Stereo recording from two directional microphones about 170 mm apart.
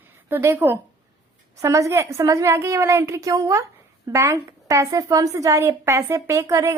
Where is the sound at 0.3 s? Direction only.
15° right (ahead or behind).